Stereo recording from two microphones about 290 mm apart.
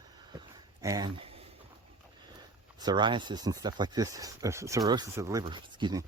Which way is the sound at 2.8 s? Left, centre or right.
Centre.